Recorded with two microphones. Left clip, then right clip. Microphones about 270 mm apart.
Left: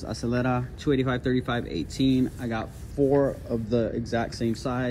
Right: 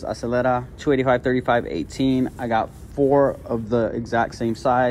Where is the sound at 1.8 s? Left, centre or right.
Right.